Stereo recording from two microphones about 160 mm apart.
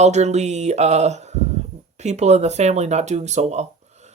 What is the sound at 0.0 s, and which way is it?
Speech, 45° right (ahead or behind).